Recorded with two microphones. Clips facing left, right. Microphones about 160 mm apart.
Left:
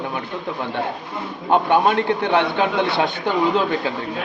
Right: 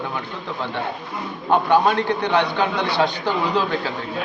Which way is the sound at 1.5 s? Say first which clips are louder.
Even; 25° left (ahead or behind).